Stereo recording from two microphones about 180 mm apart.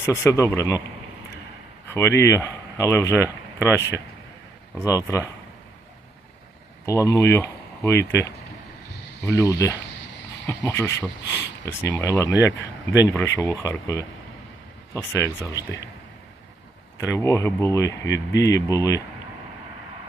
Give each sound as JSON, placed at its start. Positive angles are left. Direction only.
{"t": 0.0, "sound": "speech", "side_deg": 15}
{"t": 1.9, "sound": "speech", "side_deg": 15}
{"t": 6.8, "sound": "speech", "side_deg": 15}
{"t": 9.4, "sound": "speech", "side_deg": 20}
{"t": 17.0, "sound": "speech", "side_deg": 15}